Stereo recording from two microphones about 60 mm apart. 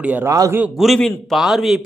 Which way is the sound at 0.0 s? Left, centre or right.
Right.